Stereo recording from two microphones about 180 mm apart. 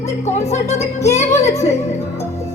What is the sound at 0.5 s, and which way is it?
Speech, 40° left (ahead or behind).